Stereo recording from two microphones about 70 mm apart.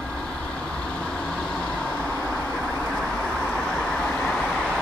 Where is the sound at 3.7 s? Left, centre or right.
Centre.